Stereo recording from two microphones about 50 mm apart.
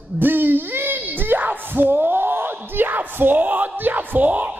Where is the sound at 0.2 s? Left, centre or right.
Right.